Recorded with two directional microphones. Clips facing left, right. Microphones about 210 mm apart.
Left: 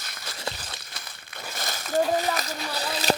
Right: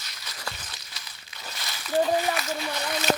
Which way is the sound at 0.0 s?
50° left (ahead or behind).